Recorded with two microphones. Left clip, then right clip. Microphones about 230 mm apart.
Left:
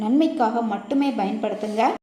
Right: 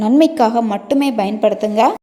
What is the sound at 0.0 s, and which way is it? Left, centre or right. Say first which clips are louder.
A woman's voice: right 8 dB; right.